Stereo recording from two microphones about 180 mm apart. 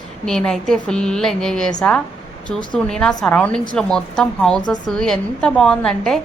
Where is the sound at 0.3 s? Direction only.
5° left (ahead or behind).